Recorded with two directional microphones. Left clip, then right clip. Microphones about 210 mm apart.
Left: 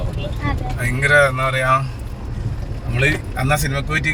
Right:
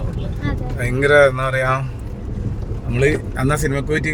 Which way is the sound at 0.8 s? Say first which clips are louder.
Right 2 dB; 50° right (ahead or behind).